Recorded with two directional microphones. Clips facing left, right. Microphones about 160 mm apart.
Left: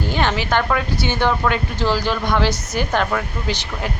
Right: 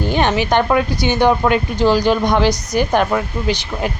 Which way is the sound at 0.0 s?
15° right (ahead or behind).